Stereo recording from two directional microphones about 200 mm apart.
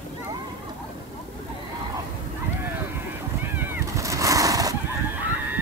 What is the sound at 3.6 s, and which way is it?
Cat, 15° right (ahead or behind).